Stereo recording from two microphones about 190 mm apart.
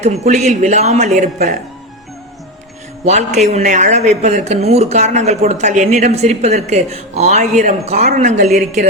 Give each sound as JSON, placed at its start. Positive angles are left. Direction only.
{"t": 0.0, "sound": "speech", "side_deg": -35}
{"t": 3.0, "sound": "speech", "side_deg": -35}